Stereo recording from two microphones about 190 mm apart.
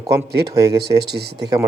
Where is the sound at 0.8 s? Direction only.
60° right (ahead or behind).